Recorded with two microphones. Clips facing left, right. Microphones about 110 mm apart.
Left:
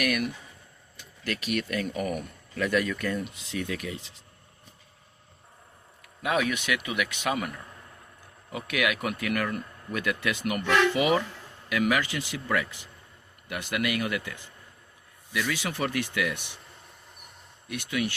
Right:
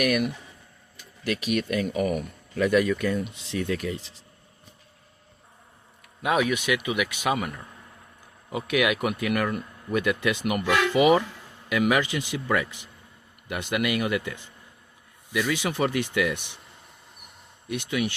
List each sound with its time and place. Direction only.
0.0 s speech: 20° right (ahead or behind)
1.9 s speech: 5° right (ahead or behind)
2.6 s speech: 20° right (ahead or behind)
3.5 s speech: 35° right (ahead or behind)
6.2 s speech: 15° right (ahead or behind)
8.5 s speech: 20° right (ahead or behind)
17.7 s speech: 20° right (ahead or behind)